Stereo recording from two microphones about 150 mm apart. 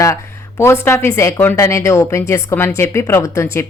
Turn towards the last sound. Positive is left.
turn(degrees=15)  # may be behind; listen again after turning